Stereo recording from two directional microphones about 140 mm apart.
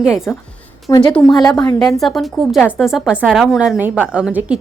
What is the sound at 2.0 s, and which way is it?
A woman's voice, centre (ahead or behind).